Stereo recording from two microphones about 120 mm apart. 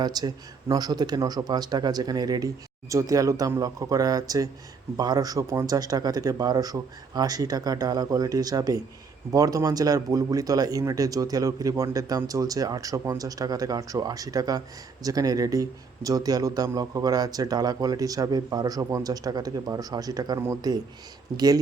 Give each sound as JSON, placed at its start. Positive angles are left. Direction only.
{"t": 0.0, "sound": "speech", "side_deg": -35}